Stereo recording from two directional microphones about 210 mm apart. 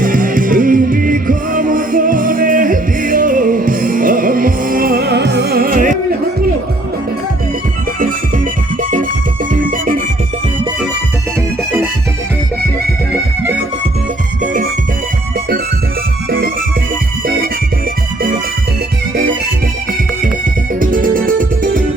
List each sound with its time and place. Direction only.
0.0 s music: 40° right (ahead or behind)
14.4 s music: 40° right (ahead or behind)
20.7 s music: 40° right (ahead or behind)